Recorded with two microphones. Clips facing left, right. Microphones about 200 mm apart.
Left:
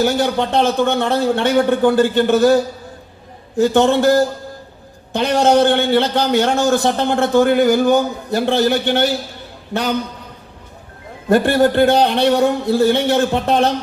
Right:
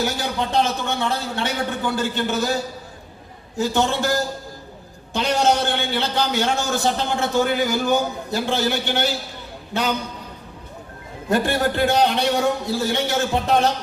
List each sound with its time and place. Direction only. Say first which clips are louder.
0.0 s a man's voice: left 8 dB; 60° left (ahead or behind)
11.3 s a man's voice: left 7 dB; 60° left (ahead or behind)